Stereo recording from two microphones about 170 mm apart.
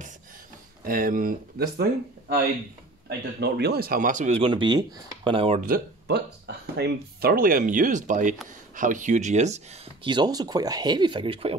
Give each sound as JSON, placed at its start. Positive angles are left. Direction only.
{"t": 0.8, "sound": "speech", "side_deg": -55}
{"t": 3.1, "sound": "speech", "side_deg": -75}
{"t": 5.6, "sound": "speech", "side_deg": -65}
{"t": 10.0, "sound": "speech", "side_deg": -25}